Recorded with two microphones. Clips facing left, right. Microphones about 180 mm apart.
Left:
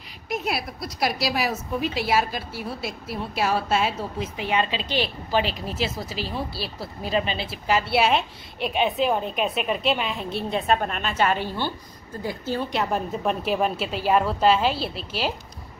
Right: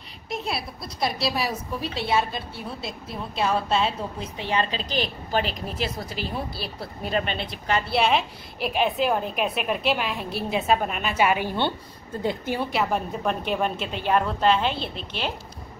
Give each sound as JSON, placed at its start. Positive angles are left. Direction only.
{"t": 0.3, "sound": "a woman's voice", "side_deg": -25}
{"t": 3.4, "sound": "a woman's voice", "side_deg": 5}
{"t": 4.2, "sound": "a woman's voice", "side_deg": -35}
{"t": 4.9, "sound": "a woman's voice", "side_deg": 5}
{"t": 12.2, "sound": "a woman's voice", "side_deg": -25}
{"t": 12.5, "sound": "a woman's voice", "side_deg": -5}